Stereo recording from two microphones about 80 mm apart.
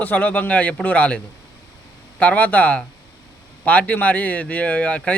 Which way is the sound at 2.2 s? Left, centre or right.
Centre.